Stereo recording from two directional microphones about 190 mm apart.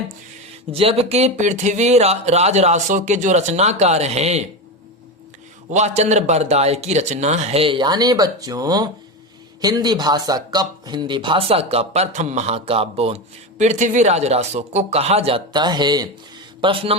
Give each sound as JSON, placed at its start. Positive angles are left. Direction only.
{"t": 0.7, "sound": "speech", "side_deg": -30}
{"t": 5.7, "sound": "speech", "side_deg": -35}